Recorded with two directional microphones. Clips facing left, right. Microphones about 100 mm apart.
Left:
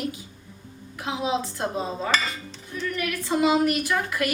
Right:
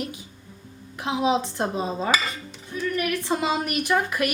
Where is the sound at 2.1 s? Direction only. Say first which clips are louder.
Right 1 dB; 15° right (ahead or behind).